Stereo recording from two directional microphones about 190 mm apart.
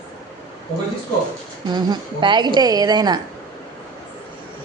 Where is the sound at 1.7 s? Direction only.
20° right (ahead or behind).